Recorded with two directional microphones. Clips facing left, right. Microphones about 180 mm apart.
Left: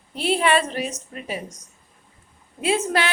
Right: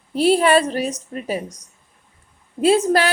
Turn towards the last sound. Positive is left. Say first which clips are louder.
# right 7 dB
turn(degrees=-35)  # may be behind; listen again after turning